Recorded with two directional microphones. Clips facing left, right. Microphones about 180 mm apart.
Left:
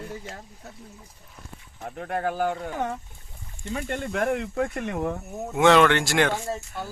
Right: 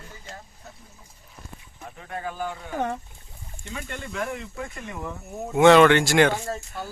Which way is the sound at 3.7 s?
45° left (ahead or behind).